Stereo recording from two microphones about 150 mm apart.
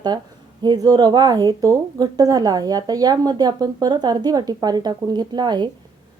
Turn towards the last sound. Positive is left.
turn(degrees=-30)  # may be behind; listen again after turning